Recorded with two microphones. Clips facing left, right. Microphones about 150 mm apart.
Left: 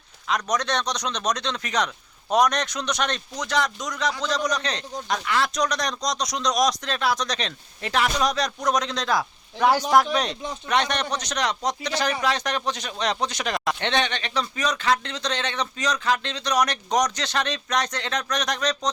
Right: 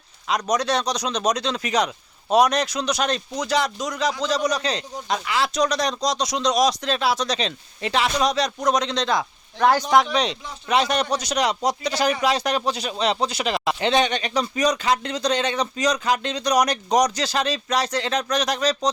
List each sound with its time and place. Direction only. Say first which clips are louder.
0.5 s speech: right 5 dB; 10° right (ahead or behind)
3.8 s speech: right 4 dB; 30° right (ahead or behind)
4.3 s a man's voice: right 3 dB; 10° right (ahead or behind)